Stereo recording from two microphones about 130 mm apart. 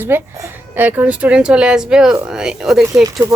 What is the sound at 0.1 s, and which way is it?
Speech, 15° right (ahead or behind).